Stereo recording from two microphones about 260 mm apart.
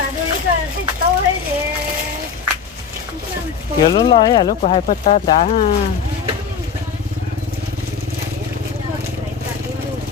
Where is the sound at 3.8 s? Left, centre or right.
Centre.